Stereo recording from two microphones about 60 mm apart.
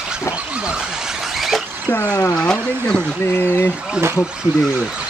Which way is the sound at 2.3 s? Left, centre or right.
Centre.